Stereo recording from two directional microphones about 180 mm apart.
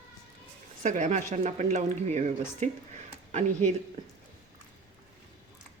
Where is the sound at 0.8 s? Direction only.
45° right (ahead or behind).